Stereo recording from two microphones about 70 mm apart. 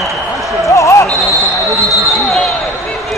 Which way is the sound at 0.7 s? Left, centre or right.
Left.